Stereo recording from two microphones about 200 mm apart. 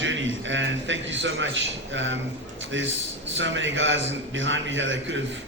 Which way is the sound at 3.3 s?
70° right (ahead or behind).